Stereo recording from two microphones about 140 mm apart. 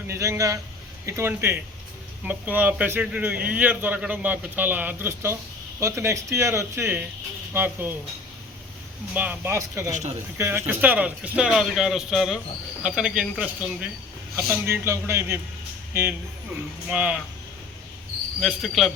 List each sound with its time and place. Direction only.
0.1 s a man's voice: 20° right (ahead or behind)
9.1 s a man's voice: 10° right (ahead or behind)
9.9 s speech: 55° right (ahead or behind)
10.3 s a man's voice: 15° right (ahead or behind)
14.3 s a man's voice: 15° right (ahead or behind)
18.3 s speech: centre (ahead or behind)